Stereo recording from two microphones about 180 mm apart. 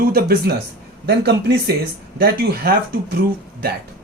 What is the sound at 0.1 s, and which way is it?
Speech, 60° right (ahead or behind).